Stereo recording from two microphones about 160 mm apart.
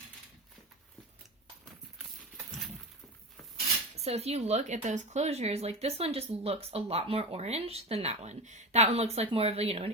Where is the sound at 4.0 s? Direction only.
40° right (ahead or behind).